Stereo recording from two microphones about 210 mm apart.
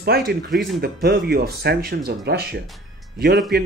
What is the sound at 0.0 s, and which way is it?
Speech, 50° right (ahead or behind).